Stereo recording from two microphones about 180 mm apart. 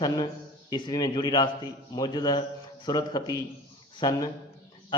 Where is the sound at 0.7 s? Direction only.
20° left (ahead or behind).